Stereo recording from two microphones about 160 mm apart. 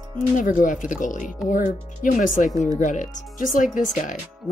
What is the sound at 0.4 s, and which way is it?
Speech, 55° left (ahead or behind).